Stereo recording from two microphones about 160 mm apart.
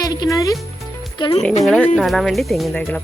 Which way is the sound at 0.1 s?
25° left (ahead or behind).